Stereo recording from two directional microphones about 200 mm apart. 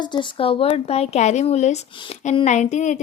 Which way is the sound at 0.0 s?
20° left (ahead or behind).